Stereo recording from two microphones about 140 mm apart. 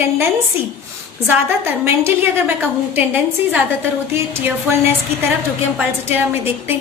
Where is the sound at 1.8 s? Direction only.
15° right (ahead or behind).